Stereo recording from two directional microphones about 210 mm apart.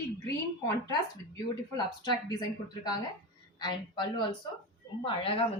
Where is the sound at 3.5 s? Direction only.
20° left (ahead or behind).